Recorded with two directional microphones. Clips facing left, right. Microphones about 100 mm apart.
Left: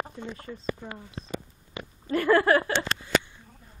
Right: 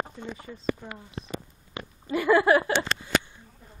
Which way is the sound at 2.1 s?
10° right (ahead or behind).